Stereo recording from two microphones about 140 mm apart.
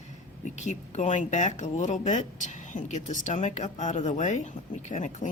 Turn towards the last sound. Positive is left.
turn(degrees=60)  # may be behind; listen again after turning